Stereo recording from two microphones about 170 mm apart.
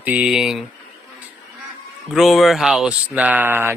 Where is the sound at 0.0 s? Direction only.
5° right (ahead or behind).